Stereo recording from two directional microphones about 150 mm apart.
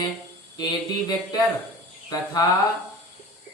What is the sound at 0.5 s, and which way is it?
Speech, 25° left (ahead or behind).